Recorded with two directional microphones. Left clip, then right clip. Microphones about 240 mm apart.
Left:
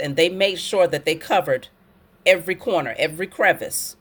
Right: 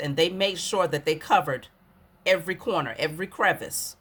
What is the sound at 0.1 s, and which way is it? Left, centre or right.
Speech, centre.